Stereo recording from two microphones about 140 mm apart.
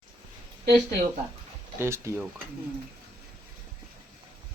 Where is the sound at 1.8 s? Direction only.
20° right (ahead or behind).